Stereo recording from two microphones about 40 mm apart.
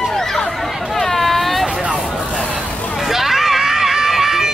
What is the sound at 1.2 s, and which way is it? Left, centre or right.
Hubbub, centre.